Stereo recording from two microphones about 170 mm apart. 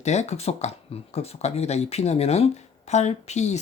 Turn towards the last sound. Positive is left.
turn(degrees=40)  # may be behind; listen again after turning